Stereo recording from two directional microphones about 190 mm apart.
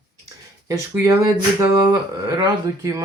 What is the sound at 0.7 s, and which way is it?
Speech, 15° right (ahead or behind).